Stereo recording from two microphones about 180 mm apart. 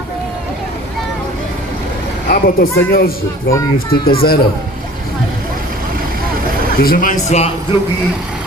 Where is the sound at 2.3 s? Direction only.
55° left (ahead or behind).